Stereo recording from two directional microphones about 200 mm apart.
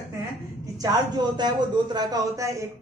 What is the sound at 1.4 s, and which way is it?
A woman's voice, 20° right (ahead or behind).